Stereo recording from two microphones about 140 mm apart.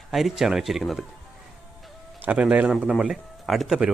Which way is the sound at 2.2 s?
10° right (ahead or behind).